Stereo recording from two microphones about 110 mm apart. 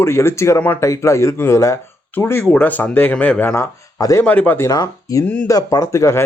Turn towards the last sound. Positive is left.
turn(degrees=25)  # may be behind; listen again after turning